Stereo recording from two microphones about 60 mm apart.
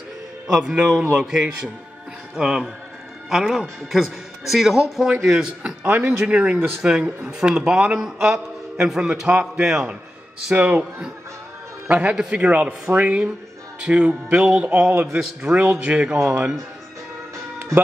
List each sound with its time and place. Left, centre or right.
0.7 s speech: centre
5.9 s speech: right
10.5 s a man's voice: right
11.9 s a man's voice: right